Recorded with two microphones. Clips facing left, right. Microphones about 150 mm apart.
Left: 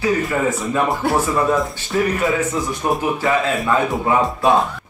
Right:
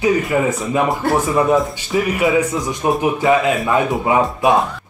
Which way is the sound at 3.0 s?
20° right (ahead or behind).